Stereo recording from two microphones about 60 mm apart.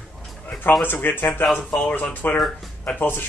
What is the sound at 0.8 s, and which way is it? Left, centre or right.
Speech, left.